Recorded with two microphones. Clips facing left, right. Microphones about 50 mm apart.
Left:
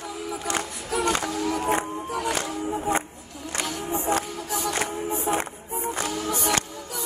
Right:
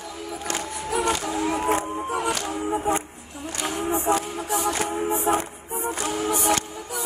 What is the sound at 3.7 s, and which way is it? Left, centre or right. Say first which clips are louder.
Music: right 4 dB; right.